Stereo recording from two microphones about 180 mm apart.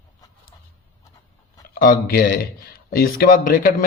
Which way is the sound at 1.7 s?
55° left (ahead or behind).